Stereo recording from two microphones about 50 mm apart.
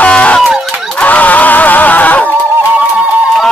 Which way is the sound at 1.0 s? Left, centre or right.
Left.